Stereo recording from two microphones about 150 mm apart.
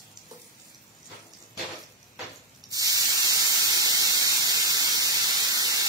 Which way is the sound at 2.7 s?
25° right (ahead or behind).